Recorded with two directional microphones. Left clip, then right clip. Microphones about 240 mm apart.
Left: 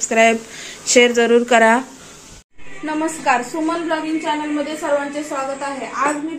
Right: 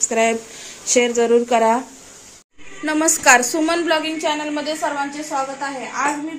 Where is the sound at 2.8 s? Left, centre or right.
Right.